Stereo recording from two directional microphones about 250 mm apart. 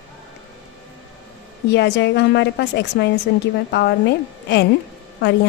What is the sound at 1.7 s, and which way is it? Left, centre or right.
A woman's voice, left.